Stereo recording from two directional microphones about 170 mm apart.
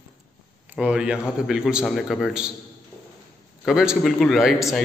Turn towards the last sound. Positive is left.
turn(degrees=0)  # may be behind; listen again after turning